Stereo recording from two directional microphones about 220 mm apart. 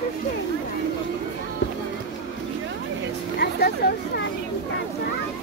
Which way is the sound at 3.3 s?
45° left (ahead or behind).